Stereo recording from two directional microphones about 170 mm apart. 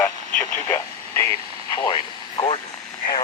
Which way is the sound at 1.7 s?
25° left (ahead or behind).